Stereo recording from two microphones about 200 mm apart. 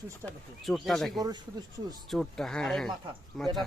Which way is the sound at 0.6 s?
Centre (ahead or behind).